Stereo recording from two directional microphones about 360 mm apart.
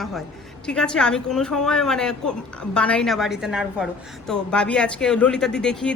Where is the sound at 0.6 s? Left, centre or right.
Centre.